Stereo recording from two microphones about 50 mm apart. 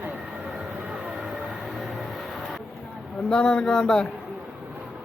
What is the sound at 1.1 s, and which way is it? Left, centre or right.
Train, centre.